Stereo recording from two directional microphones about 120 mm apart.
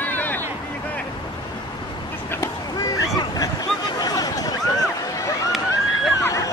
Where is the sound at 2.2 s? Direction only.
30° left (ahead or behind).